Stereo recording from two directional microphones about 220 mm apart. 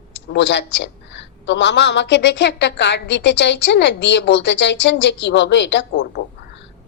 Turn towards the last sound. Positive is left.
turn(degrees=55)  # may be behind; listen again after turning